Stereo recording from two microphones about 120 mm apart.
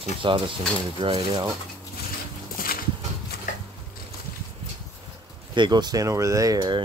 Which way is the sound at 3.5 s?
90° left.